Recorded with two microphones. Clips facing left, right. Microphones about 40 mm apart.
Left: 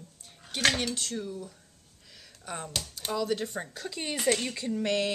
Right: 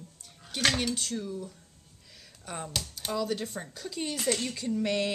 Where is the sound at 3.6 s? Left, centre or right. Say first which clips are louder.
Even; left.